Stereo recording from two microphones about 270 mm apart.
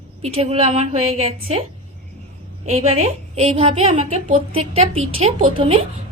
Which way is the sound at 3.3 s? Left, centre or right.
Right.